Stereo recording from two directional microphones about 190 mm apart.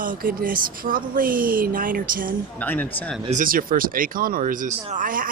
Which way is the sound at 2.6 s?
10° left (ahead or behind).